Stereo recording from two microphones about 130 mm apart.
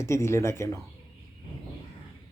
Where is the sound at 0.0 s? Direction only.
20° left (ahead or behind).